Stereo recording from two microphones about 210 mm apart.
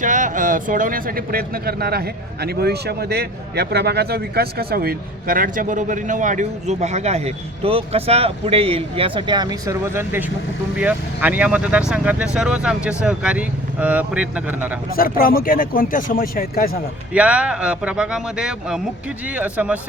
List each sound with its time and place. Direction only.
0.0 s speech: 35° right (ahead or behind); by 14.8 s 10° right (ahead or behind)
14.9 s speech: 45° left (ahead or behind)
17.2 s speech: 5° right (ahead or behind)